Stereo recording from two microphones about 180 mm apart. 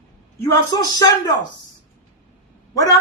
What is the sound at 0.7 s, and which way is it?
Speech, 20° left (ahead or behind).